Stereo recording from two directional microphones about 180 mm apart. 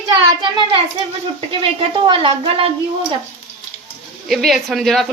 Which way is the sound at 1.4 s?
30° right (ahead or behind).